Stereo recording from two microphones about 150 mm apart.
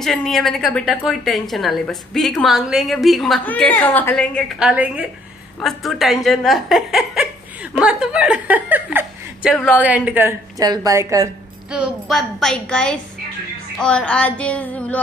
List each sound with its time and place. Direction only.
0.0 s speech: centre (ahead or behind)
3.4 s child singing: 10° left (ahead or behind)
4.6 s a woman's voice: 5° right (ahead or behind)
10.6 s a woman's voice: 25° right (ahead or behind)
11.7 s speech: 5° right (ahead or behind)
13.7 s child singing: 5° left (ahead or behind)